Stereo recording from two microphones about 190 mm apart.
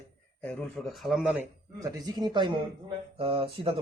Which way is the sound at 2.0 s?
20° right (ahead or behind).